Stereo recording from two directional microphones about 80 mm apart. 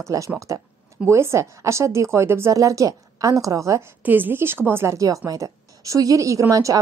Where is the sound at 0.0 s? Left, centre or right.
Right.